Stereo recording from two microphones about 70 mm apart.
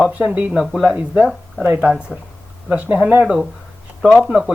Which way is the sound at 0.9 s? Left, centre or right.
Right.